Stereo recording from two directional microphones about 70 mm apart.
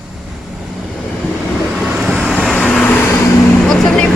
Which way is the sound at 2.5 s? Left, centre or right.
Centre.